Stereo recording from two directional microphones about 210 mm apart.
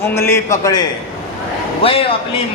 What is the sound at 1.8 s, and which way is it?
Speech, 25° left (ahead or behind).